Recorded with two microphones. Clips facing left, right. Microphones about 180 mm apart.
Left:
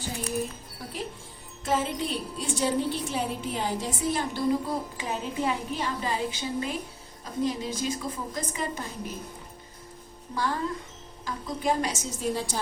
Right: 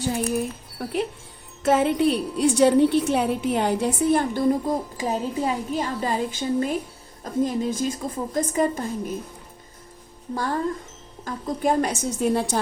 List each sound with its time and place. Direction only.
0.0 s a woman's voice: 60° right (ahead or behind)
11.3 s a woman's voice: 50° right (ahead or behind)